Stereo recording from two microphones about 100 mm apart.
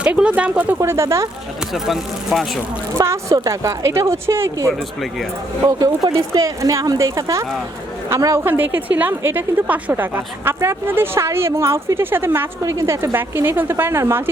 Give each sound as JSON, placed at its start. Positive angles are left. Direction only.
{"t": 0.0, "sound": "speech", "side_deg": -10}
{"t": 0.8, "sound": "a woman's voice", "side_deg": -30}
{"t": 1.7, "sound": "speech", "side_deg": -5}
{"t": 3.0, "sound": "a woman's voice", "side_deg": -25}
{"t": 5.6, "sound": "a woman's voice", "side_deg": -40}
{"t": 8.4, "sound": "a woman's voice", "side_deg": -20}